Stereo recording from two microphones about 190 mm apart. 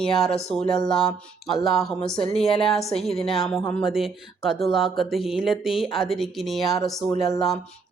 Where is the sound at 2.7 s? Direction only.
Centre (ahead or behind).